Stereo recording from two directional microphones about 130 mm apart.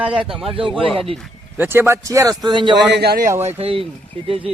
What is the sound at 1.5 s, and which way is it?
Speech, 15° right (ahead or behind).